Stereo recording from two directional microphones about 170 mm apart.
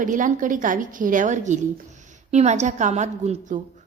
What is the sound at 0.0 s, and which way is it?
A woman's voice, 50° right (ahead or behind).